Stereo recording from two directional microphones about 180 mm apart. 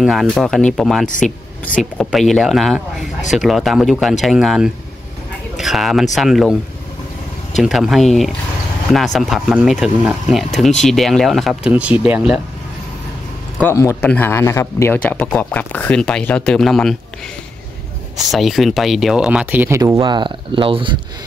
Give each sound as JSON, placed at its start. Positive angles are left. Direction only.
{"t": 0.0, "sound": "speech", "side_deg": 0}
{"t": 7.5, "sound": "speech", "side_deg": 0}
{"t": 13.6, "sound": "speech", "side_deg": 15}
{"t": 18.1, "sound": "speech", "side_deg": 0}
{"t": 19.8, "sound": "speech", "side_deg": -25}